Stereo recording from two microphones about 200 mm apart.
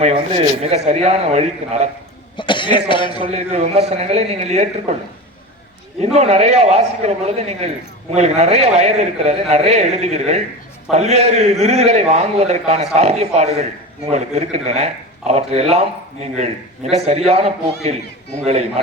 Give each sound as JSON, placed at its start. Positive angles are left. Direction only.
{"t": 0.0, "sound": "a man's voice", "side_deg": -30}
{"t": 2.3, "sound": "speech", "side_deg": 25}
{"t": 3.2, "sound": "a man's voice", "side_deg": -30}
{"t": 6.0, "sound": "a man's voice", "side_deg": -35}